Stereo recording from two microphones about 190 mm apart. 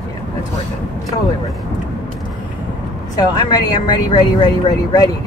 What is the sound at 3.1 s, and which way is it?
Speech, 20° left (ahead or behind).